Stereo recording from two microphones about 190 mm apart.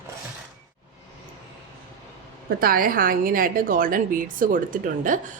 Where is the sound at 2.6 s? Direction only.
50° right (ahead or behind).